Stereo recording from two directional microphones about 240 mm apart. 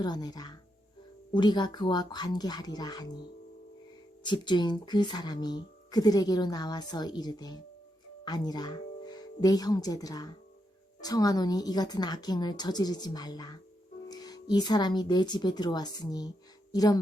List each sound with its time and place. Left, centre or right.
0.0 s speech: centre
4.2 s speech: centre